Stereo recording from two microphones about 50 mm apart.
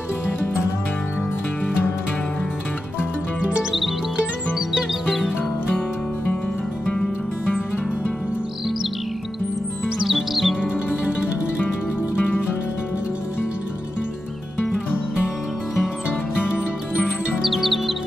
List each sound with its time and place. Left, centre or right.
3.0 s music: centre
4.6 s music: centre
7.5 s music: left
9.9 s music: centre
17.4 s music: centre